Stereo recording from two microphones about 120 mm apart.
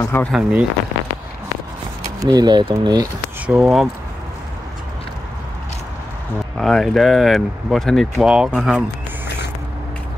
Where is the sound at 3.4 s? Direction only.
5° right (ahead or behind).